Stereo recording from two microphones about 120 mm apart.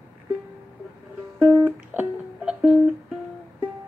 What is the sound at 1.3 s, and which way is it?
Music, 10° right (ahead or behind).